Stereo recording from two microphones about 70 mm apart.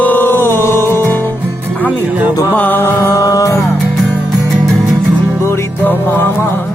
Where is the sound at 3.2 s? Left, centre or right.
Left.